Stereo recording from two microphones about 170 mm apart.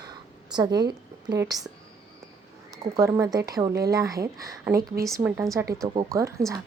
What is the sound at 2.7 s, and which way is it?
Speech, 20° right (ahead or behind).